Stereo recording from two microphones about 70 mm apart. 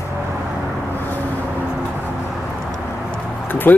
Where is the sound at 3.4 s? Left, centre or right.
Left.